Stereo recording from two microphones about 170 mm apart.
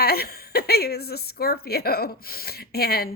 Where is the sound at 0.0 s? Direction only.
65° left (ahead or behind).